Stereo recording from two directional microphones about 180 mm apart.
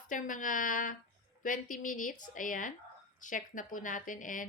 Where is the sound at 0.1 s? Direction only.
45° left (ahead or behind).